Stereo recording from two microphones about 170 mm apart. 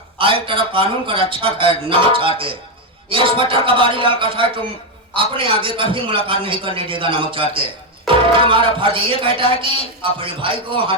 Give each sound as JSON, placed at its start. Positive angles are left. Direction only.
{"t": 0.2, "sound": "a man's voice", "side_deg": -30}